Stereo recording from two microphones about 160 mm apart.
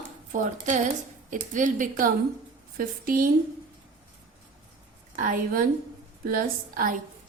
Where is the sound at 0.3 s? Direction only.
55° right (ahead or behind).